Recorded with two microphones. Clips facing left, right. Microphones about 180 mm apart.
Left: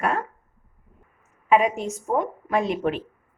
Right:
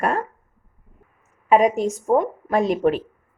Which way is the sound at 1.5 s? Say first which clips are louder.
Right 4 dB; 40° right (ahead or behind).